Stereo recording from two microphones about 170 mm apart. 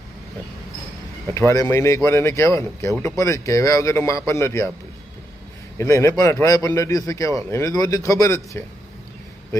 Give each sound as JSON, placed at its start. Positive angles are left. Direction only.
{"t": 1.3, "sound": "speech", "side_deg": 15}
{"t": 5.7, "sound": "a man's voice", "side_deg": 15}